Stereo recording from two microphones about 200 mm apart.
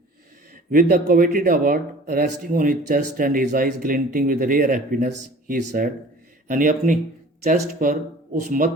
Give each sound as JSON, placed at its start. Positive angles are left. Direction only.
{"t": 0.7, "sound": "speech", "side_deg": -40}